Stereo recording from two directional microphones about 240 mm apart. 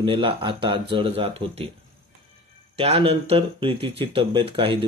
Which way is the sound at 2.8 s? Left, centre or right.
Right.